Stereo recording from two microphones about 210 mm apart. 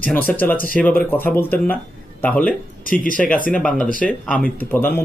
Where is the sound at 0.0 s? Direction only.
10° left (ahead or behind).